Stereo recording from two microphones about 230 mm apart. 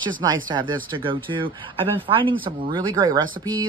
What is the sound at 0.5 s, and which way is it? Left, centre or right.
Speech, right.